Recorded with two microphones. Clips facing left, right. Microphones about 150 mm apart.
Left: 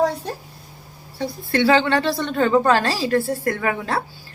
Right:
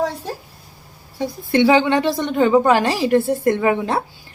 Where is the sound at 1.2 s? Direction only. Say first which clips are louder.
Right 4 dB; 15° right (ahead or behind).